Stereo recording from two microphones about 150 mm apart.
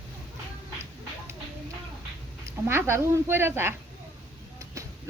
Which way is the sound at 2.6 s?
15° right (ahead or behind).